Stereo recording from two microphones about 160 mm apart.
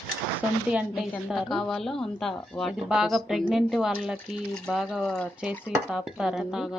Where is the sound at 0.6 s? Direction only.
5° right (ahead or behind).